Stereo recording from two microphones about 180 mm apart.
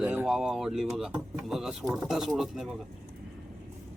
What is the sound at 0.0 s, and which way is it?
Speech, 5° right (ahead or behind).